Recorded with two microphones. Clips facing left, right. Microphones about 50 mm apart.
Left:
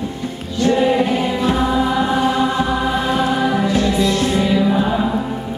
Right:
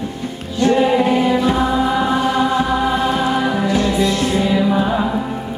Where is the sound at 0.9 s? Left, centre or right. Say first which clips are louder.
Right 2 dB; centre.